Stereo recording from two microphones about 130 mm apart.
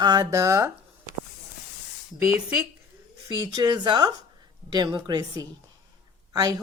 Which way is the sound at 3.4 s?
30° right (ahead or behind).